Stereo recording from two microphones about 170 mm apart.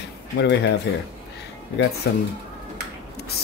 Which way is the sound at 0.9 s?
90° left.